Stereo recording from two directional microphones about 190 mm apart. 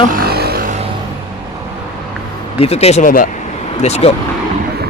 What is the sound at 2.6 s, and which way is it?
Speech, 35° left (ahead or behind).